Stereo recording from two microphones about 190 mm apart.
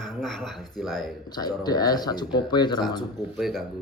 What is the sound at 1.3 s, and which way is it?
Speech, 20° left (ahead or behind).